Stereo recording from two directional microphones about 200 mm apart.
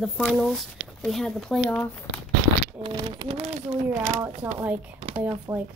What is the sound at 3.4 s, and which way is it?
Speech, 35° right (ahead or behind).